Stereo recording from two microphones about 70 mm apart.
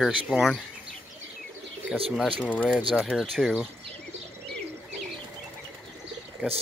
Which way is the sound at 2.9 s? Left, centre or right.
Centre.